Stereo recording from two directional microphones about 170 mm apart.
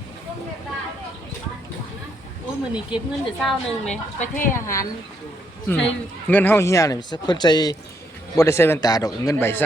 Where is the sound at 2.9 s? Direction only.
30° left (ahead or behind).